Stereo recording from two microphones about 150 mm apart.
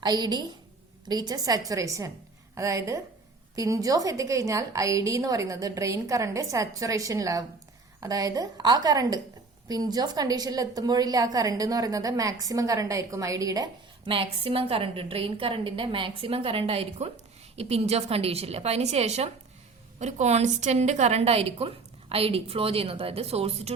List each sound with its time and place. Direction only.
0.0 s a woman's voice: 30° right (ahead or behind)